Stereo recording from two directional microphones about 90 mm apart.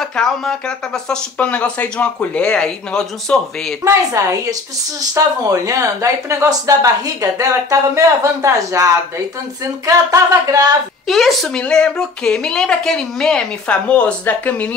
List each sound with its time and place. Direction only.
0.0 s speech: 5° left (ahead or behind)
3.8 s speech: 35° right (ahead or behind)
11.1 s speech: centre (ahead or behind); by 14.7 s 20° left (ahead or behind)